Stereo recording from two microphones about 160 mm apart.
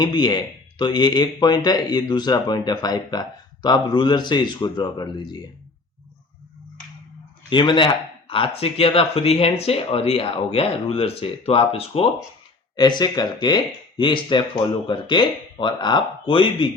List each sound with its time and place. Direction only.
0.0 s speech: 25° left (ahead or behind)
7.5 s speech: 30° left (ahead or behind)
12.7 s speech: 25° left (ahead or behind)